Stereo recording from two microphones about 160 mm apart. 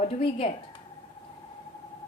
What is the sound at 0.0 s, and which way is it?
Speech, 40° left (ahead or behind).